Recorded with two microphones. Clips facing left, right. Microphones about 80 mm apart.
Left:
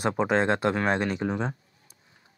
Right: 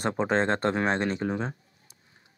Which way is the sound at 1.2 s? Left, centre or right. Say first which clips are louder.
Left 1 dB; left.